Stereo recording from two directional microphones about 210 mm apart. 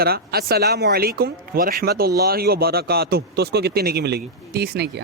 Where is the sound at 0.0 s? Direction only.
45° right (ahead or behind).